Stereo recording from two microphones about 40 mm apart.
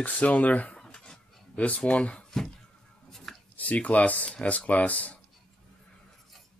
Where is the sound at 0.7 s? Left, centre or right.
Left.